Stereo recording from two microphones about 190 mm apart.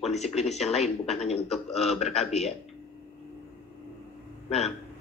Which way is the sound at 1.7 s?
35° left (ahead or behind).